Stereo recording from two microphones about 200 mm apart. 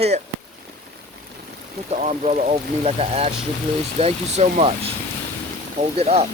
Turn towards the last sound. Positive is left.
turn(degrees=-30)  # may be behind; listen again after turning